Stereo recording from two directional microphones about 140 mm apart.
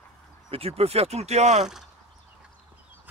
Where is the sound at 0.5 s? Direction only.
45° right (ahead or behind).